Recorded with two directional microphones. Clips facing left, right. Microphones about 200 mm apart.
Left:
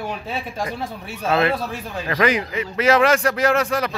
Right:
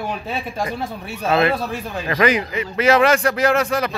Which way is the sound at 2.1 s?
5° right (ahead or behind).